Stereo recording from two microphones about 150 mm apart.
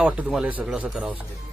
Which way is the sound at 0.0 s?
5° right (ahead or behind).